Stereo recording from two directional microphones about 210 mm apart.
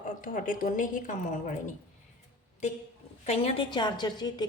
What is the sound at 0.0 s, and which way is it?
A woman's voice, 40° left (ahead or behind).